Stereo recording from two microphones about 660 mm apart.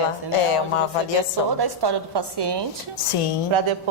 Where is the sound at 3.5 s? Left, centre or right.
Right.